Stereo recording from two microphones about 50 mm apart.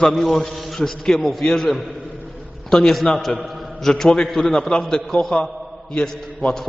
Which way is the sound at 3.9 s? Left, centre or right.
Centre.